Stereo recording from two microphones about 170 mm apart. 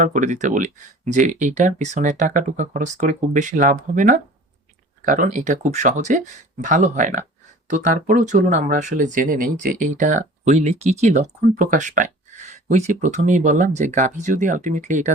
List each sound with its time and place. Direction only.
0.0 s speech: 45° right (ahead or behind)